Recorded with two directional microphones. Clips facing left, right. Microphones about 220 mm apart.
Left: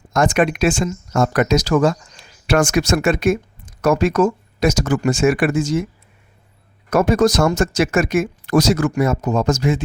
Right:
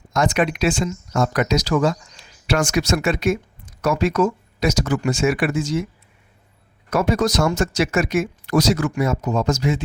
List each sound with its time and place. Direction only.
0.1 s speech: 50° left (ahead or behind)
6.9 s speech: 50° left (ahead or behind)